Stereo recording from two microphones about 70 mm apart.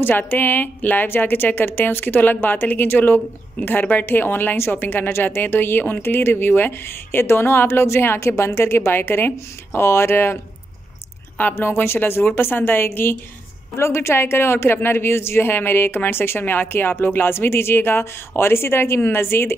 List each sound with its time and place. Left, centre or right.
0.0 s a woman's voice: left